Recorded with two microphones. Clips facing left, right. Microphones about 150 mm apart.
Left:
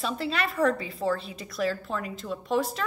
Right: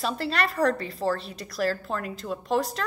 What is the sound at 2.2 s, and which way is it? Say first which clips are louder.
Speech: right 1 dB; centre (ahead or behind).